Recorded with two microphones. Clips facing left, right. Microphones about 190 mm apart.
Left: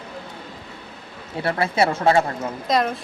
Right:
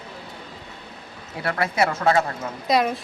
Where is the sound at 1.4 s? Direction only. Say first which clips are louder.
Left 2 dB; 25° left (ahead or behind).